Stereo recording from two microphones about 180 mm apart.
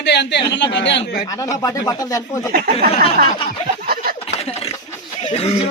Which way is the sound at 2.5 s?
55° right (ahead or behind).